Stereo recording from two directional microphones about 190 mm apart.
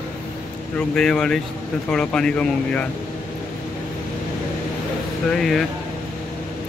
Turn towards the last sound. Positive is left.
turn(degrees=0)  # may be behind; listen again after turning